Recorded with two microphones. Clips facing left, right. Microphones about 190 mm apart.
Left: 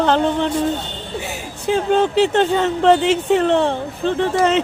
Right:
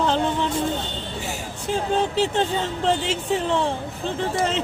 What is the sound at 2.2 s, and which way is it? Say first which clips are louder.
Speech: left 7 dB; 70° left (ahead or behind).